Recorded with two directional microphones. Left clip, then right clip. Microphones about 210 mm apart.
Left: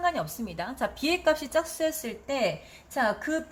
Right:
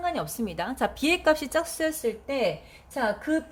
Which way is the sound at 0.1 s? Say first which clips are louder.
Right 1 dB; 30° right (ahead or behind).